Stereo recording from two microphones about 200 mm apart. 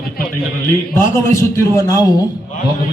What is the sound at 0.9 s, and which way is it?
A man's voice, 15° left (ahead or behind).